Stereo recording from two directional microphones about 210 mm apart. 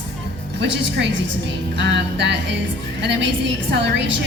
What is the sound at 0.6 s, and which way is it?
A woman's voice, 55° right (ahead or behind).